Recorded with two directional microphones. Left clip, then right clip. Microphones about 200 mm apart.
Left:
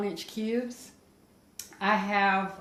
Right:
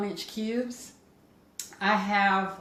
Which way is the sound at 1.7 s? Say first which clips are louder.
Right 1 dB; 30° left (ahead or behind).